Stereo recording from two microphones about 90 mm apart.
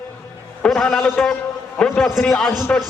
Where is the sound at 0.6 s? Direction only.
5° left (ahead or behind).